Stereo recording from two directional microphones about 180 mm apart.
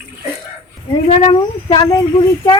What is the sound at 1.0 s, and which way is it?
Speech, 30° left (ahead or behind).